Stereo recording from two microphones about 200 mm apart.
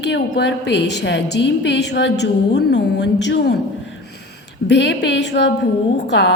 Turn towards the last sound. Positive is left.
turn(degrees=60)  # may be behind; listen again after turning